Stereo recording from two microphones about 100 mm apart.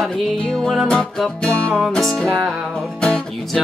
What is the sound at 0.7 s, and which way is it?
Music, 5° left (ahead or behind).